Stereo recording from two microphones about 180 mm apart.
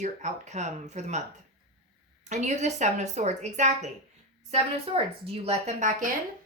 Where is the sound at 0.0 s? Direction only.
40° right (ahead or behind).